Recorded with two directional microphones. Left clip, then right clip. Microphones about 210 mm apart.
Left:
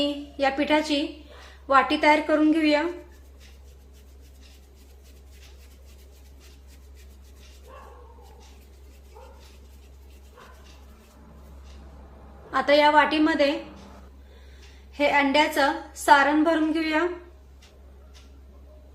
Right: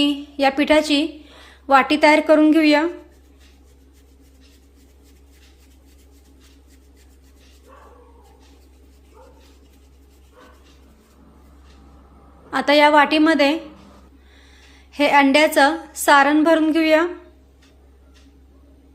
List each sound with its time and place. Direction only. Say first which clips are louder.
0.0 s a woman's voice: right 6 dB; 50° right (ahead or behind)
12.5 s a woman's voice: right 5 dB; 50° right (ahead or behind)
14.9 s a woman's voice: right 6 dB; 50° right (ahead or behind)